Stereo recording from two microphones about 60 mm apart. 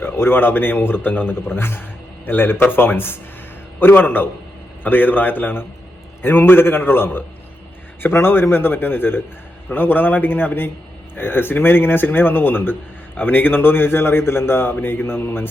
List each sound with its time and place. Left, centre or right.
0.0 s a man's voice: left